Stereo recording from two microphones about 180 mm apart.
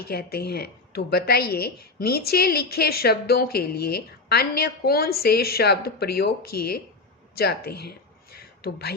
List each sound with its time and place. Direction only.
0.0 s a woman's voice: 60° left (ahead or behind)